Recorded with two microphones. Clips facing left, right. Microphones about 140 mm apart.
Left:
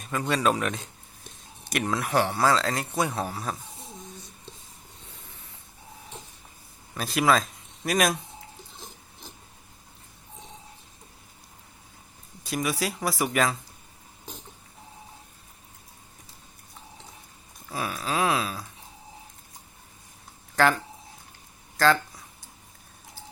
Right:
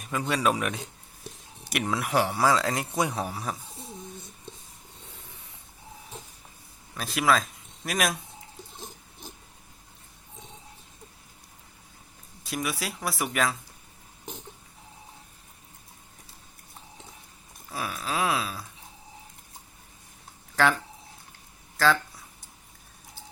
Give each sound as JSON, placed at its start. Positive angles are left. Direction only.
{"t": 0.0, "sound": "a man's voice", "side_deg": -10}
{"t": 6.9, "sound": "speech", "side_deg": 0}
{"t": 12.4, "sound": "speech", "side_deg": 0}
{"t": 17.7, "sound": "speech", "side_deg": 0}